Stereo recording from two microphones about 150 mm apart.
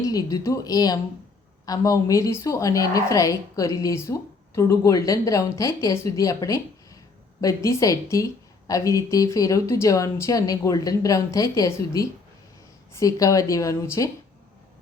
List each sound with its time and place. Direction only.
0.0 s a woman's voice: 25° left (ahead or behind)